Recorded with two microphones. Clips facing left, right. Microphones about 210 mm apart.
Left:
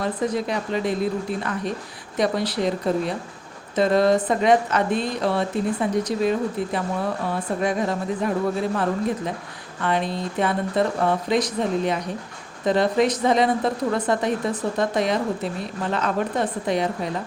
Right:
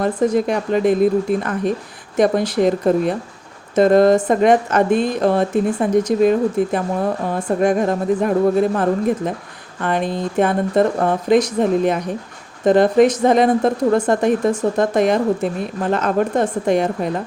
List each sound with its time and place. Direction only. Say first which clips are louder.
0.0 s a woman's voice: right 7 dB; 50° right (ahead or behind)